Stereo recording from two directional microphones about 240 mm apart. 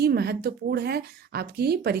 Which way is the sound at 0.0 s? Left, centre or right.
Right.